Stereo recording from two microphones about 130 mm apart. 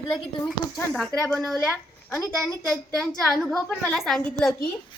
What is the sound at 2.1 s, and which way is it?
Speech, 25° left (ahead or behind).